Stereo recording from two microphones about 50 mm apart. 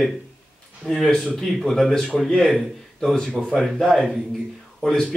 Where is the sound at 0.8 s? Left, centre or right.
Centre.